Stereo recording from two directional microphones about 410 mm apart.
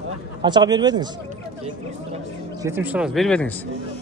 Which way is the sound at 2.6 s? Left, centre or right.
Centre.